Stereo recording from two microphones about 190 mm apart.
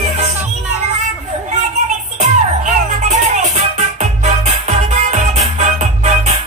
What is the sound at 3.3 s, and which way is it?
Music, 35° right (ahead or behind).